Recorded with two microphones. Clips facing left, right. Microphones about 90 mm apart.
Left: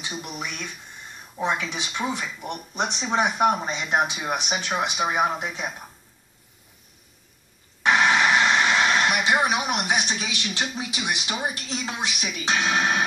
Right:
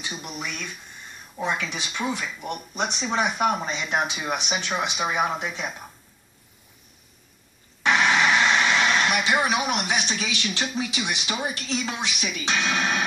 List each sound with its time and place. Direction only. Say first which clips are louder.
0.3 s speech: even; 15° left (ahead or behind)
7.8 s speech: left 1 dB; 15° left (ahead or behind)